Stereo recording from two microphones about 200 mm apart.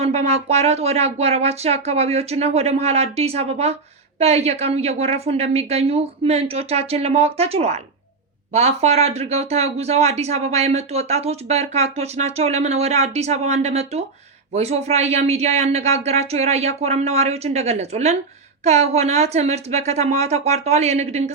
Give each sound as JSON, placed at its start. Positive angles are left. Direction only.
{"t": 0.0, "sound": "speech", "side_deg": -35}